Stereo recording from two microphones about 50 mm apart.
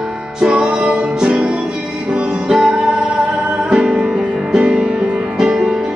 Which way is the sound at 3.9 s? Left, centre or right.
Centre.